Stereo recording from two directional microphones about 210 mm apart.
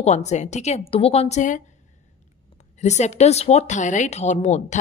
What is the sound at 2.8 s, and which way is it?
Speech, 35° left (ahead or behind).